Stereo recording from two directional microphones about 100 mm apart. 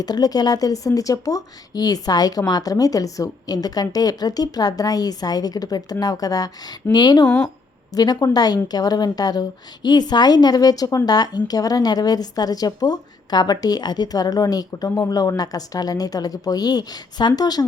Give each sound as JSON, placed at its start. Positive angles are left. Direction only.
{"t": 0.0, "sound": "a woman's voice", "side_deg": 40}
{"t": 7.3, "sound": "speech", "side_deg": 10}
{"t": 7.9, "sound": "a woman's voice", "side_deg": 40}